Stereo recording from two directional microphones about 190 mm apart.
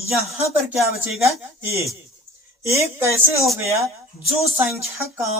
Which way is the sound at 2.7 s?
15° right (ahead or behind).